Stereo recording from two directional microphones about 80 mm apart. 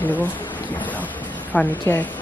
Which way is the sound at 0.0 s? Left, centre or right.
Left.